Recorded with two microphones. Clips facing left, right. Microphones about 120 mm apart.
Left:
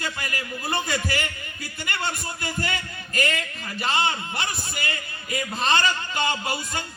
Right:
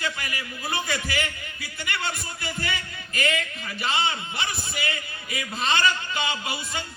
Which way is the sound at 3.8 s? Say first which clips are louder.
Left 2 dB; 45° left (ahead or behind).